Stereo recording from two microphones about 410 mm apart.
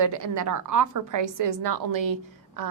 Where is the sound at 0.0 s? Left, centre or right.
Right.